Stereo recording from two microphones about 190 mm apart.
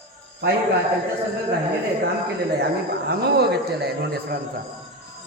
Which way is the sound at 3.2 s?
60° right (ahead or behind).